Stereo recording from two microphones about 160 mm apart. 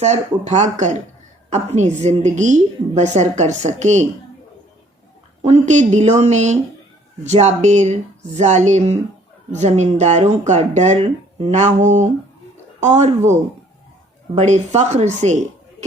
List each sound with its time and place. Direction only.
0.0 s speech: 45° right (ahead or behind)
5.4 s speech: 45° right (ahead or behind)